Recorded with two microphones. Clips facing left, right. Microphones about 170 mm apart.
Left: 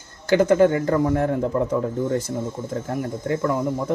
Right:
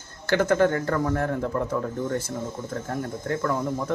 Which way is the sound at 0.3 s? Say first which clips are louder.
Left 5 dB; 15° left (ahead or behind).